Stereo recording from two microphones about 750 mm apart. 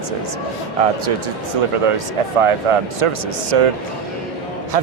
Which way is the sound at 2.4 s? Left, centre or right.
Right.